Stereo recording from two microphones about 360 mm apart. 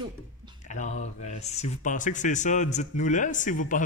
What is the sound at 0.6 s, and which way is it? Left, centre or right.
Speech, centre.